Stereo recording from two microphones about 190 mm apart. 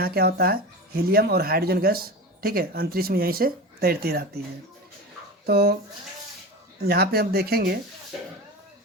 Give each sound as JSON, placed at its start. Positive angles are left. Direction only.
{"t": 0.0, "sound": "speech", "side_deg": -55}
{"t": 5.5, "sound": "speech", "side_deg": -55}
{"t": 6.8, "sound": "speech", "side_deg": -55}